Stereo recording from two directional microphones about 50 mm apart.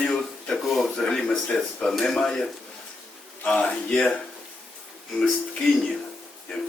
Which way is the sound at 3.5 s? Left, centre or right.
Left.